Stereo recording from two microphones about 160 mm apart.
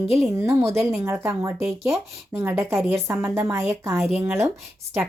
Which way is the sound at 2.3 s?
15° right (ahead or behind).